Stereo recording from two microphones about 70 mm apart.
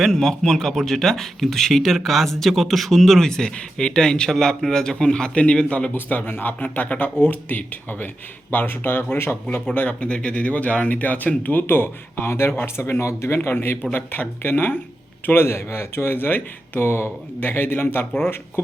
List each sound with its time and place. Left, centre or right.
0.0 s speech: centre
5.9 s speech: left
9.7 s speech: centre